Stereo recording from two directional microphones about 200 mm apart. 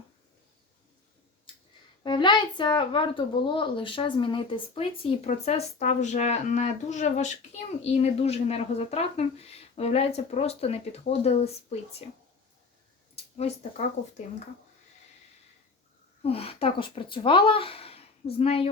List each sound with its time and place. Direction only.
2.0 s speech: 25° left (ahead or behind)
13.3 s speech: 35° left (ahead or behind)
16.2 s speech: 30° left (ahead or behind)